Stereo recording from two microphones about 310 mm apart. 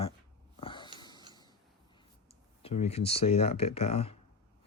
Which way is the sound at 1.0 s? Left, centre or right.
Centre.